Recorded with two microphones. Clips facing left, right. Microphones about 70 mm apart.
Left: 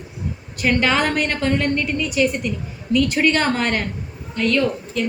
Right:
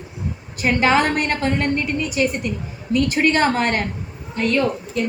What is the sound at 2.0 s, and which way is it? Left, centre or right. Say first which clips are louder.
Speech: left 1 dB; right.